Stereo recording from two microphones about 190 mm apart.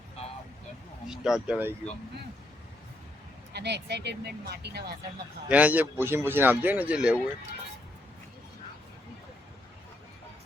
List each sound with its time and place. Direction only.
1.0 s speech: 5° right (ahead or behind)
3.5 s speech: 60° right (ahead or behind)
5.5 s speech: 10° right (ahead or behind)